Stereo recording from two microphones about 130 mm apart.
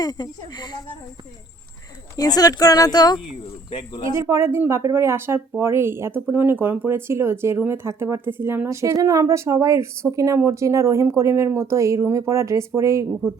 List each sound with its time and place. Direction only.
0.0 s speech: 30° left (ahead or behind)
2.1 s speech: 30° left (ahead or behind)
4.1 s speech: 25° right (ahead or behind)